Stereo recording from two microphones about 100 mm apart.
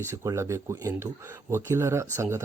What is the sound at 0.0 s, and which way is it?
Speech, 25° right (ahead or behind).